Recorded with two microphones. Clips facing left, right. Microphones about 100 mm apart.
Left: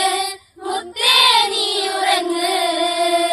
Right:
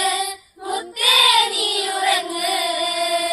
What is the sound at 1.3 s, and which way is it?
Child singing, 90° left.